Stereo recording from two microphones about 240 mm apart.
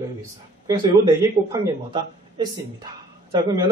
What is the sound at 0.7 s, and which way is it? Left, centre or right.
A man's voice, centre.